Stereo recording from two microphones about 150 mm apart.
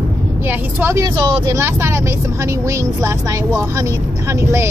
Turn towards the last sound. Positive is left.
turn(degrees=-20)  # may be behind; listen again after turning